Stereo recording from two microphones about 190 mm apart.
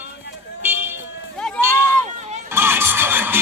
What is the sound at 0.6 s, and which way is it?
Vehicle, 10° right (ahead or behind).